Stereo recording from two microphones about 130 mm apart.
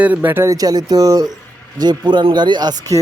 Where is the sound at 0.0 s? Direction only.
15° right (ahead or behind).